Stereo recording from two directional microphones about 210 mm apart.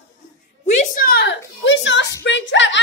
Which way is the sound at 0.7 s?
35° left (ahead or behind).